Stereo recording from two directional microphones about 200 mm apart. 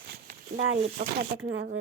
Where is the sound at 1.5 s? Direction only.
60° right (ahead or behind).